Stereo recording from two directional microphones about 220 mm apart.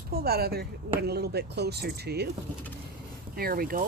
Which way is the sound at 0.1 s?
45° right (ahead or behind).